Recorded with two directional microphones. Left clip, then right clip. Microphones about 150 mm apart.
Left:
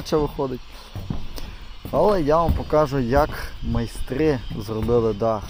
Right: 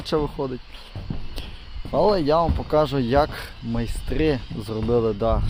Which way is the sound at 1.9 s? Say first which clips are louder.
Left 1 dB; 10° right (ahead or behind).